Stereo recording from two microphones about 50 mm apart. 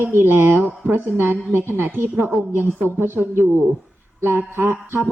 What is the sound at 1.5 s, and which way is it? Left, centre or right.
Speech, right.